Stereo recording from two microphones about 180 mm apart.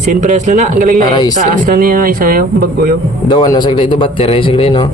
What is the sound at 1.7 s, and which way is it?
Speech, 55° right (ahead or behind).